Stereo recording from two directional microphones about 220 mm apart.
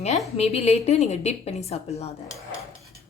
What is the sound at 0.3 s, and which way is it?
A woman's voice, 30° left (ahead or behind).